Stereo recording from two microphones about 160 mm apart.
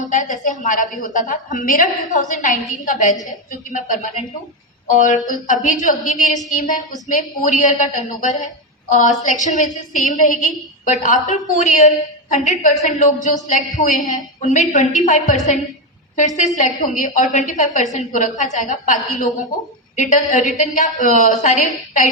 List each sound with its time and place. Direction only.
0.0 s a woman's voice: 55° left (ahead or behind)
16.6 s a woman's voice: 55° left (ahead or behind)